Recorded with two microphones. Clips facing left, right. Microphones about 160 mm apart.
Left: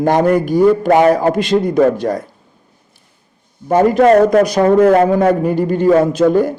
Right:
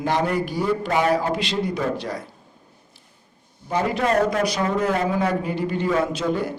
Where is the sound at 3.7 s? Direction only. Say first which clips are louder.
Left 12 dB; 50° left (ahead or behind).